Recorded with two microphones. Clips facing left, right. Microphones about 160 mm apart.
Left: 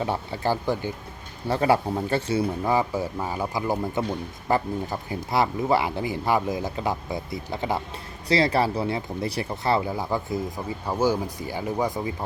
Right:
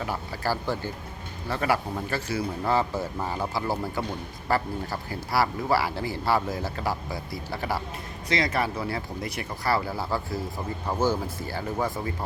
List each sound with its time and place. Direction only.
0.0 s speech: 25° left (ahead or behind)
1.5 s speech: 30° left (ahead or behind)
2.6 s speech: 15° left (ahead or behind)
8.3 s speech: 30° left (ahead or behind); by 12.1 s 15° left (ahead or behind)